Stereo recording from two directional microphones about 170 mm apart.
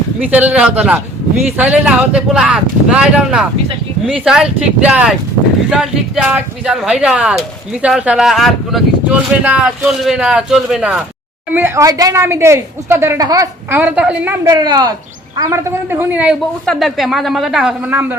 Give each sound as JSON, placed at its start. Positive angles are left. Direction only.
{"t": 0.2, "sound": "a woman's voice", "side_deg": -10}
{"t": 11.5, "sound": "a woman's voice", "side_deg": -15}
{"t": 14.4, "sound": "a woman's voice", "side_deg": -20}
{"t": 16.6, "sound": "speech", "side_deg": 0}